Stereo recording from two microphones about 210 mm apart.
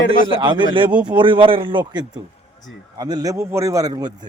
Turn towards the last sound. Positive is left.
turn(degrees=-20)  # may be behind; listen again after turning